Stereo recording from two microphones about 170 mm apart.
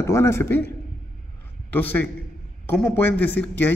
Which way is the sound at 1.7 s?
10° left (ahead or behind).